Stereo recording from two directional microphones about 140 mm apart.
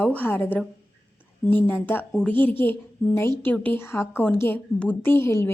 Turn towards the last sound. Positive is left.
turn(degrees=20)  # may be behind; listen again after turning